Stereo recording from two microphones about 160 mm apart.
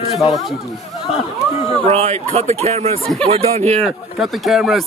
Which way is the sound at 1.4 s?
Centre (ahead or behind).